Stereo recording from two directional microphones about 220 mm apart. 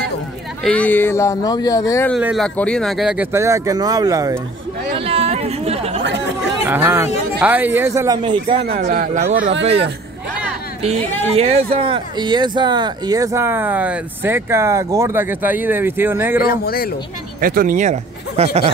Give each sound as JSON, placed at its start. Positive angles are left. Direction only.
{"t": 0.7, "sound": "speech", "side_deg": 5}
{"t": 2.1, "sound": "speech", "side_deg": 0}
{"t": 4.9, "sound": "chatter", "side_deg": -25}
{"t": 6.7, "sound": "speech", "side_deg": -10}
{"t": 8.2, "sound": "speech", "side_deg": -25}
{"t": 9.6, "sound": "speech", "side_deg": -25}
{"t": 16.4, "sound": "speech", "side_deg": 45}
{"t": 17.4, "sound": "speech", "side_deg": -40}